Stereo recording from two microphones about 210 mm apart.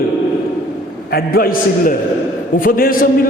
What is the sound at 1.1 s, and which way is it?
A man's voice, 45° left (ahead or behind).